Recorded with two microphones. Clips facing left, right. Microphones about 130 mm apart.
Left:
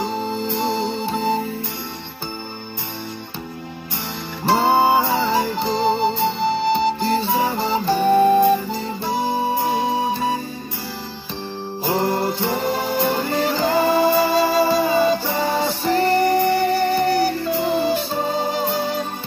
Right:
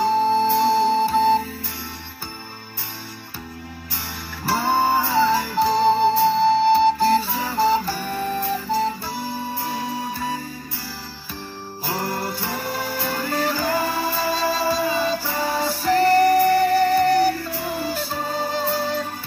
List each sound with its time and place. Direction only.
0.6 s music: 20° left (ahead or behind)
4.4 s music: 20° left (ahead or behind)
8.1 s flute: 55° left (ahead or behind)
8.7 s music: 20° left (ahead or behind)
11.8 s music: 20° left (ahead or behind)